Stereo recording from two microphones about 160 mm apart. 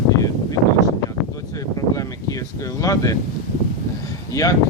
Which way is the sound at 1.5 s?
20° left (ahead or behind).